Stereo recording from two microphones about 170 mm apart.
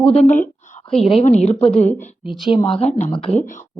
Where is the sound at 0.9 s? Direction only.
5° left (ahead or behind).